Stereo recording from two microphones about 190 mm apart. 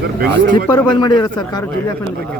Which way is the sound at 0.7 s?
20° left (ahead or behind).